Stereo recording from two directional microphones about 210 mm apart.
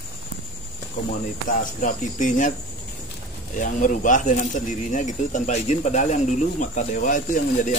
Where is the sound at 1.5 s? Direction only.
40° left (ahead or behind).